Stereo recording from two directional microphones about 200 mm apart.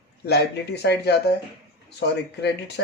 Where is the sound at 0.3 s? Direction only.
55° left (ahead or behind).